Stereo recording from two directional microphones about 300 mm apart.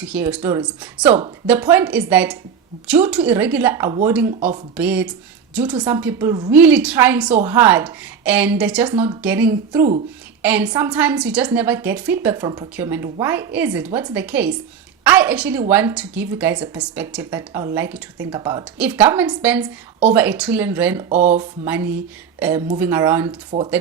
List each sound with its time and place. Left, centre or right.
0.0 s a woman's voice: centre
23.5 s speech: right